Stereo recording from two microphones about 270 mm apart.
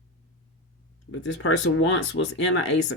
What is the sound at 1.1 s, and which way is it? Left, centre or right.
Speech, left.